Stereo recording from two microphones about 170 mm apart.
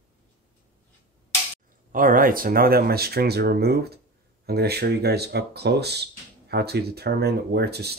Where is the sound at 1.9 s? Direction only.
55° right (ahead or behind).